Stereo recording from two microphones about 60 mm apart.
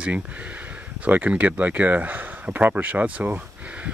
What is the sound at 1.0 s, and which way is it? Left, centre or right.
Speech, right.